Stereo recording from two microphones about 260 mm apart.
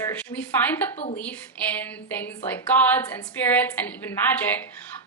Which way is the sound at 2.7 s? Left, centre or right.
Centre.